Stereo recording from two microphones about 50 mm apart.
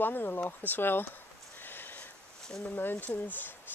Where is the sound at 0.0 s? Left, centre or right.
Left.